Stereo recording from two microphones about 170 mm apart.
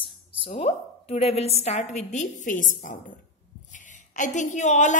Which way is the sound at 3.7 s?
45° left (ahead or behind).